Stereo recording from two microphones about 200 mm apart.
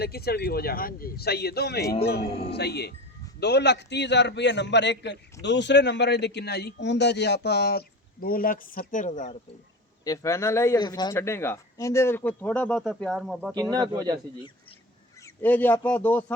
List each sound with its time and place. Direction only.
0.0 s a man's voice: 50° left (ahead or behind)
10.0 s speech: 15° left (ahead or behind); by 13.5 s centre (ahead or behind)
13.5 s speech: 20° right (ahead or behind)
15.4 s speech: 10° left (ahead or behind)